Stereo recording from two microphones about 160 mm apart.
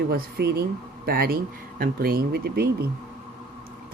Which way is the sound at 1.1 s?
70° right (ahead or behind).